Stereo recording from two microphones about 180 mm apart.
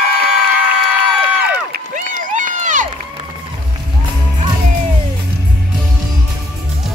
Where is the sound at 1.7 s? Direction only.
45° right (ahead or behind).